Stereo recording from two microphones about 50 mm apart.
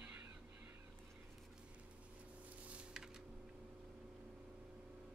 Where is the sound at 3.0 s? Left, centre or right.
Centre.